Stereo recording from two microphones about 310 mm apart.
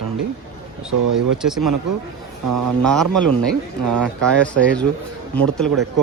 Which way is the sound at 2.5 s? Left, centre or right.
Right.